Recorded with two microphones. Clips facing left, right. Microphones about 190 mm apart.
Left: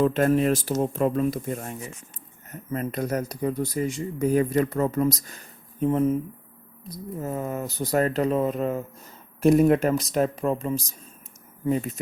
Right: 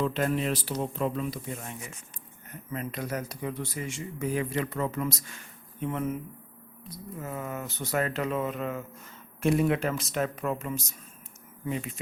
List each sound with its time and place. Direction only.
0.0 s speech: 50° left (ahead or behind)
7.2 s speech: 35° left (ahead or behind)